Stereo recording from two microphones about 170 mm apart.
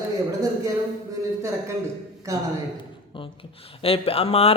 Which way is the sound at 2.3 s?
20° right (ahead or behind).